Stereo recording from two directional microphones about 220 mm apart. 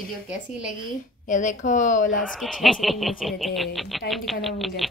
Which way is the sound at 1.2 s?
35° left (ahead or behind).